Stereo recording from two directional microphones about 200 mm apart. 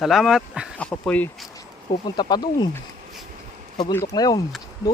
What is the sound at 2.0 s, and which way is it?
Speech, 20° left (ahead or behind).